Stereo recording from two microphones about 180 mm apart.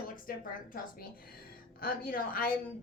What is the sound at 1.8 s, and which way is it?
Speech, 55° left (ahead or behind).